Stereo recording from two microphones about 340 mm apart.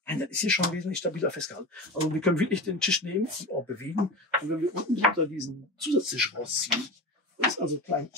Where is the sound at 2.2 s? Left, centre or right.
Centre.